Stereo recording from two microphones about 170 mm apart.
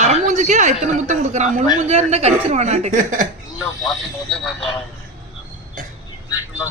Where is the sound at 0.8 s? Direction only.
45° right (ahead or behind).